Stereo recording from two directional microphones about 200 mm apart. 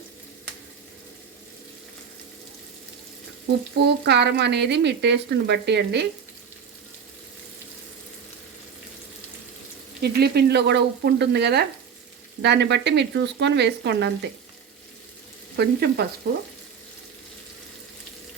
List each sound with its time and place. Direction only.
3.8 s speech: 60° right (ahead or behind)
10.0 s speech: 55° right (ahead or behind)
15.5 s frying: 55° right (ahead or behind)